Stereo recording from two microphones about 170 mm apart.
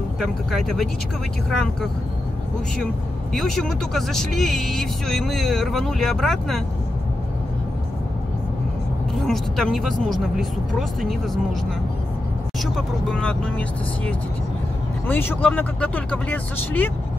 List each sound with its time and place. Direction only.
0.2 s speech: centre (ahead or behind)
3.3 s speech: centre (ahead or behind)
9.1 s speech: centre (ahead or behind)
12.7 s speech: 5° left (ahead or behind)